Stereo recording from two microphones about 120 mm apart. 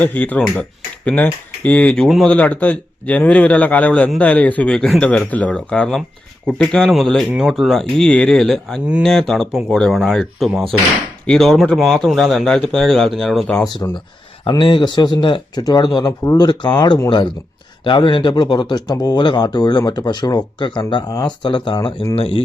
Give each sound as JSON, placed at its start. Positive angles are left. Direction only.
{"t": 0.0, "sound": "speech", "side_deg": 15}
{"t": 13.8, "sound": "speech", "side_deg": 30}
{"t": 14.6, "sound": "speech", "side_deg": 40}
{"t": 22.1, "sound": "speech", "side_deg": 50}